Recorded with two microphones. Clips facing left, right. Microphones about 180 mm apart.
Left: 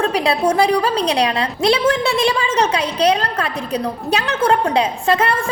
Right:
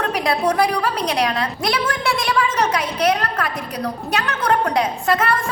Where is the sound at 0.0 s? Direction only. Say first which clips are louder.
Left 3 dB; 25° left (ahead or behind).